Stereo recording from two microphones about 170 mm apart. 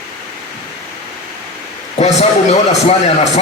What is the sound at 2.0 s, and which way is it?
A man's voice, 40° left (ahead or behind).